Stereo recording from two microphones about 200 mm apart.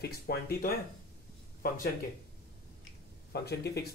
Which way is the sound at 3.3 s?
55° left (ahead or behind).